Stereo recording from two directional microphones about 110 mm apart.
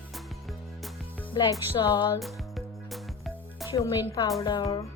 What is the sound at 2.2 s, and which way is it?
Music, centre (ahead or behind).